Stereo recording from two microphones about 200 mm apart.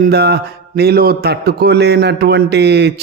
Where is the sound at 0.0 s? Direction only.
55° right (ahead or behind).